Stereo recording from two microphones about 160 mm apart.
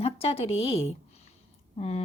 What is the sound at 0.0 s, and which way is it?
A woman's voice, 40° left (ahead or behind).